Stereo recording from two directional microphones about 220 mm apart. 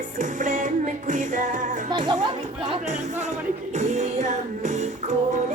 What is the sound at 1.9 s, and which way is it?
Chatter, 20° right (ahead or behind).